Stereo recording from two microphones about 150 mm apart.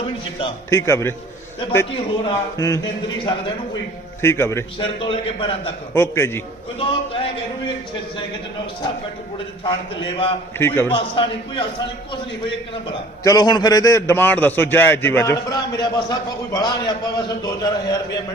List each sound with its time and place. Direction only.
0.7 s a man's voice: 20° left (ahead or behind)
2.2 s a man's voice: 25° left (ahead or behind)
4.2 s a man's voice: 15° left (ahead or behind)
4.8 s a man's voice: 35° left (ahead or behind)
5.9 s a man's voice: 15° left (ahead or behind)
6.7 s a man's voice: 35° left (ahead or behind)
9.6 s a man's voice: 35° left (ahead or behind)
10.6 s a man's voice: 15° left (ahead or behind)
10.9 s a man's voice: 35° left (ahead or behind)
13.2 s a man's voice: 25° left (ahead or behind)